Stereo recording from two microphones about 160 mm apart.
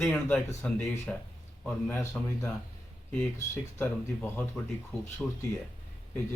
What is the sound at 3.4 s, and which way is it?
Speech, 15° left (ahead or behind).